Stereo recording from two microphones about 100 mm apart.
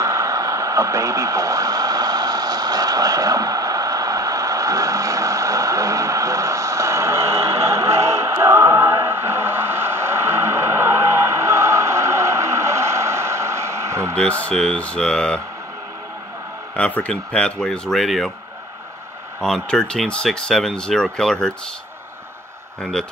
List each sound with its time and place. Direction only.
0.0 s radio: 30° right (ahead or behind)
14.1 s speech: 10° left (ahead or behind)
16.7 s speech: 15° left (ahead or behind)
19.4 s speech: 5° left (ahead or behind)
22.8 s speech: 5° left (ahead or behind)